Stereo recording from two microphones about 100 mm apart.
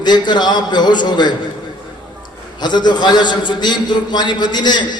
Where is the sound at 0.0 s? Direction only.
45° left (ahead or behind).